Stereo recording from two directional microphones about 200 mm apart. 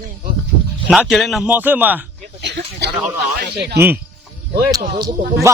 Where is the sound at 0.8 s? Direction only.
5° right (ahead or behind).